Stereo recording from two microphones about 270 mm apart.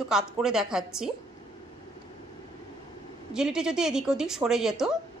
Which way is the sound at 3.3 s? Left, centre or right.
Centre.